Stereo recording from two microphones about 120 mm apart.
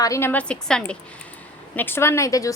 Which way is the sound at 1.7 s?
20° left (ahead or behind).